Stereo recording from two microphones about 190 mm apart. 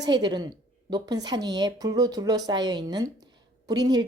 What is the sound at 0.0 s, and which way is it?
A woman's voice, 20° right (ahead or behind).